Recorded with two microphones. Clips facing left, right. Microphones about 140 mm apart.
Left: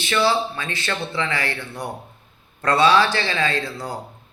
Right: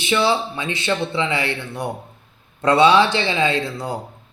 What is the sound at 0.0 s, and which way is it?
A man's voice, 20° right (ahead or behind).